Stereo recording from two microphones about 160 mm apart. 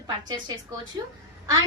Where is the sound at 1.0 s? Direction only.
25° right (ahead or behind).